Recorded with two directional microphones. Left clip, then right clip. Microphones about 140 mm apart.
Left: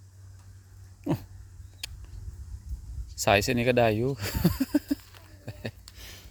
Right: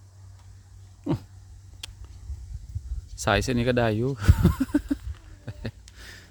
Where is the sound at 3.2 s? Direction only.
25° right (ahead or behind).